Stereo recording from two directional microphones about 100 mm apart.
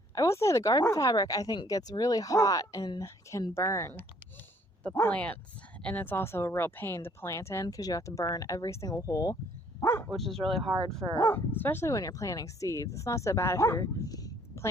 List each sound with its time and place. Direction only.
0.1 s speech: 30° left (ahead or behind)
5.0 s speech: 15° left (ahead or behind); by 9.4 s 40° left (ahead or behind)
9.8 s bow-wow: 30° left (ahead or behind)
10.1 s speech: 5° left (ahead or behind)
10.6 s speech: 55° right (ahead or behind)
11.3 s speech: 20° left (ahead or behind)